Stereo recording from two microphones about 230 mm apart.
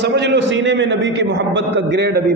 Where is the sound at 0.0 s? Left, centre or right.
Right.